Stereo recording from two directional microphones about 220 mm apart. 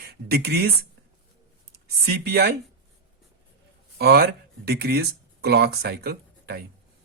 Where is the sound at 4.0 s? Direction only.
45° right (ahead or behind).